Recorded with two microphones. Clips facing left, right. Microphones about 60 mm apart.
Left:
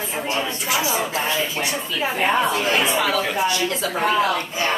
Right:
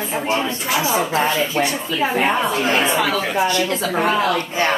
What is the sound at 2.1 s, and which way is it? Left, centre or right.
Speech, right.